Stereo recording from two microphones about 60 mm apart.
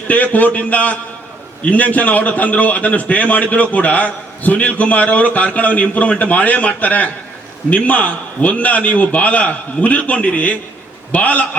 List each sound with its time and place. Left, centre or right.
0.1 s a man's voice: left